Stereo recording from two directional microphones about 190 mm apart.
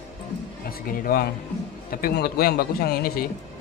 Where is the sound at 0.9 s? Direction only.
50° left (ahead or behind).